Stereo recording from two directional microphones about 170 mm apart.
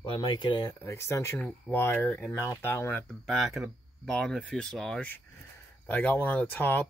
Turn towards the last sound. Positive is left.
turn(degrees=10)  # may be behind; listen again after turning